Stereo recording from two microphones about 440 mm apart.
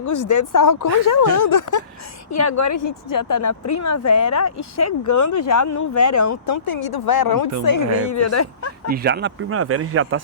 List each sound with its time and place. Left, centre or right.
0.0 s speech: left
8.9 s speech: right